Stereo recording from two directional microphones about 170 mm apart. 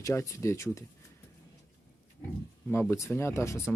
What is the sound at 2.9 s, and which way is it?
Speech, 15° left (ahead or behind).